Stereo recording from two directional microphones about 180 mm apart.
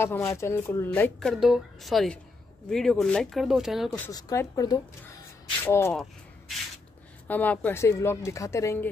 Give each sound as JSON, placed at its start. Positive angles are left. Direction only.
{"t": 0.0, "sound": "a woman's voice", "side_deg": 15}
{"t": 4.1, "sound": "a woman's voice", "side_deg": 20}
{"t": 7.2, "sound": "a woman's voice", "side_deg": 10}